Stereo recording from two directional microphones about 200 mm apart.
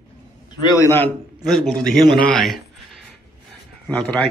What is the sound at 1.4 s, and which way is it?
Speech, centre (ahead or behind).